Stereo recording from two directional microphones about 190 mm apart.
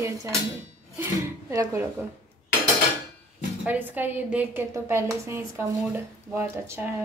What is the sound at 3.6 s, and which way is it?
A woman's voice, 10° right (ahead or behind).